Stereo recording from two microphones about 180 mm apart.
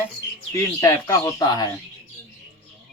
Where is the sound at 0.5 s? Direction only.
15° left (ahead or behind).